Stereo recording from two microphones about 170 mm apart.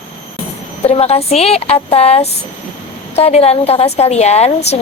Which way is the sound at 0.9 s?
35° left (ahead or behind).